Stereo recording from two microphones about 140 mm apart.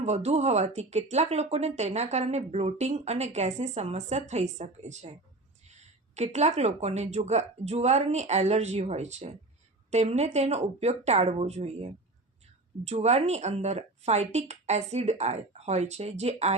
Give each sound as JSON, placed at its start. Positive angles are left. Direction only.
{"t": 0.0, "sound": "speech", "side_deg": -50}
{"t": 6.1, "sound": "speech", "side_deg": -55}